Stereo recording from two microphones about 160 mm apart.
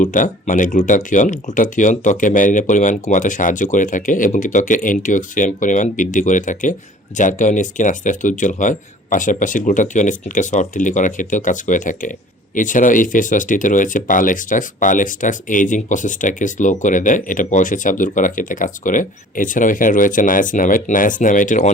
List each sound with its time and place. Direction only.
0.0 s speech: 55° left (ahead or behind)